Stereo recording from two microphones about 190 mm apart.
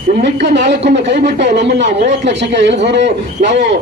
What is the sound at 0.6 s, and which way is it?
A man's voice, 65° right (ahead or behind).